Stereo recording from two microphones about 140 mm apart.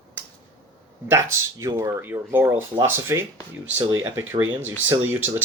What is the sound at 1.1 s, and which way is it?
Speech, 20° right (ahead or behind).